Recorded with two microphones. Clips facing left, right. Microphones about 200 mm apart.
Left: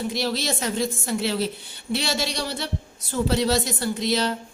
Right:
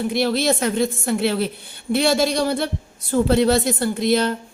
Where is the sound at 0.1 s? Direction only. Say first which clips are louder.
Right 7 dB; 55° right (ahead or behind).